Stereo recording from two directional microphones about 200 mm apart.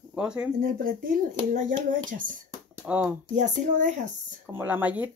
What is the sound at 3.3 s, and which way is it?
Speech, 35° right (ahead or behind).